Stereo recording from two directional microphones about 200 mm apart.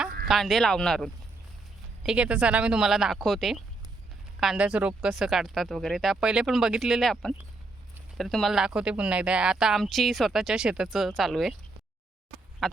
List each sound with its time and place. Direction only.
0.3 s speech: centre (ahead or behind)
12.6 s speech: centre (ahead or behind)